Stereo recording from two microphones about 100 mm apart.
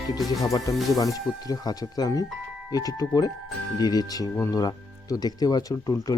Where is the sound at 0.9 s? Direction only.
40° left (ahead or behind).